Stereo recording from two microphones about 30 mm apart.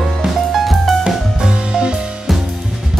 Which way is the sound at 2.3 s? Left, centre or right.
Centre.